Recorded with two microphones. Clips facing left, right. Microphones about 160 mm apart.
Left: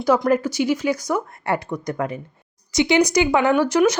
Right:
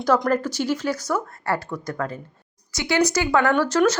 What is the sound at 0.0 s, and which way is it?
Speech, 10° left (ahead or behind).